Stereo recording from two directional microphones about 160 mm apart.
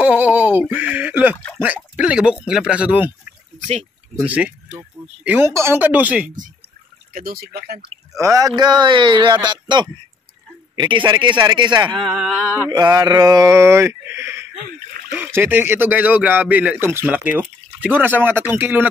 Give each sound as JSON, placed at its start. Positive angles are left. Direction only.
{"t": 0.0, "sound": "speech", "side_deg": -10}
{"t": 4.3, "sound": "speech", "side_deg": -10}
{"t": 7.1, "sound": "speech", "side_deg": -60}
{"t": 8.2, "sound": "speech", "side_deg": -20}
{"t": 12.1, "sound": "a sound", "side_deg": 0}
{"t": 12.7, "sound": "speech", "side_deg": -25}